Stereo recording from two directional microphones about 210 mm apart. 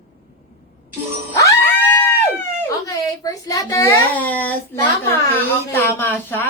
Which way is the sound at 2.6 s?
15° left (ahead or behind).